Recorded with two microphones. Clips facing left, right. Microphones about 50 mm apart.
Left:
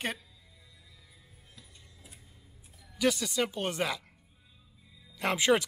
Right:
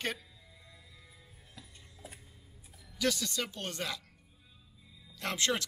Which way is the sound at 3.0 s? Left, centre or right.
Centre.